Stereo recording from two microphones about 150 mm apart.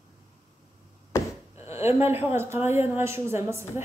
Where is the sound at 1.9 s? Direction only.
15° right (ahead or behind).